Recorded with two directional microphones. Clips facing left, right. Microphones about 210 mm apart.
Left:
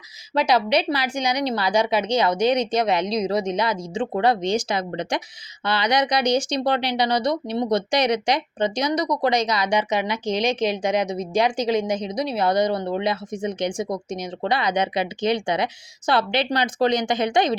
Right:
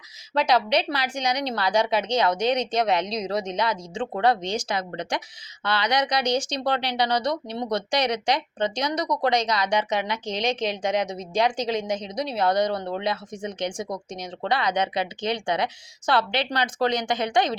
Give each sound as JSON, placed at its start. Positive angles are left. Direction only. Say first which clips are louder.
{"t": 0.3, "sound": "a woman's voice", "louder": "left 2 dB", "side_deg": 5}